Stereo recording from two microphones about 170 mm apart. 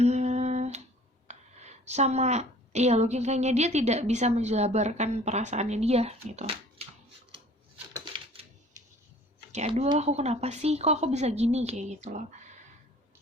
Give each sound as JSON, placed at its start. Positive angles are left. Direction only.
{"t": 0.0, "sound": "humming", "side_deg": -40}
{"t": 1.3, "sound": "a woman's voice", "side_deg": -40}
{"t": 9.5, "sound": "a woman's voice", "side_deg": -40}